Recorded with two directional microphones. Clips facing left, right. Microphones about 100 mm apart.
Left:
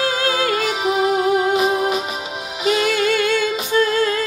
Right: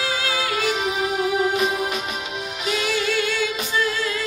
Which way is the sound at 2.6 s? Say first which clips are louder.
Left 7 dB; 45° left (ahead or behind).